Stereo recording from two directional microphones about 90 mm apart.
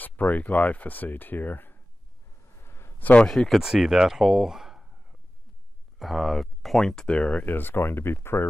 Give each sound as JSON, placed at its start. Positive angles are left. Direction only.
{"t": 0.0, "sound": "speech", "side_deg": 20}
{"t": 2.6, "sound": "a sound", "side_deg": 30}
{"t": 3.1, "sound": "speech", "side_deg": 10}
{"t": 5.9, "sound": "speech", "side_deg": 0}